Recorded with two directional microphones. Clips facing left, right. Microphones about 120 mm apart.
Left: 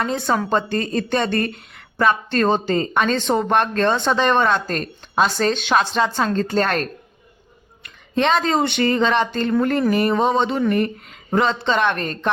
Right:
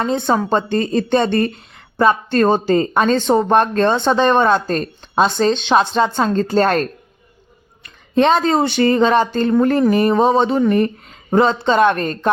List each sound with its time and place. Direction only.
0.0 s a woman's voice: 25° right (ahead or behind)
8.1 s a woman's voice: 35° right (ahead or behind)